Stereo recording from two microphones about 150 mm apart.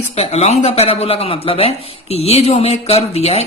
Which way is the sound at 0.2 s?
45° left (ahead or behind).